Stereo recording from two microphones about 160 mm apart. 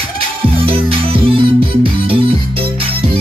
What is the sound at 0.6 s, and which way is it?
Music, 35° right (ahead or behind).